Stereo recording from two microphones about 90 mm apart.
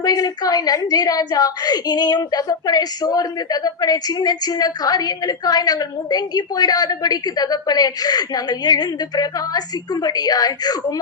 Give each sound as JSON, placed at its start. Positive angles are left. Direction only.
{"t": 0.0, "sound": "a woman's voice", "side_deg": 45}